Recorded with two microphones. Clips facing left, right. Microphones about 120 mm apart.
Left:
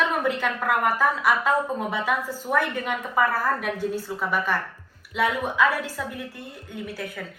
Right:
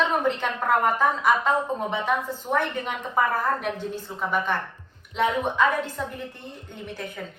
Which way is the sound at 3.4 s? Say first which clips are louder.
Left 1 dB; 20° right (ahead or behind).